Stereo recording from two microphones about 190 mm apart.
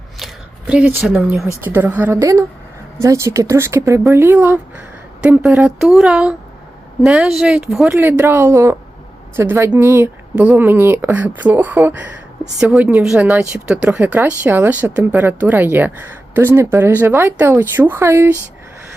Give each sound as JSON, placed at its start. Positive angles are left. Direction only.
{"t": 0.7, "sound": "speech", "side_deg": -10}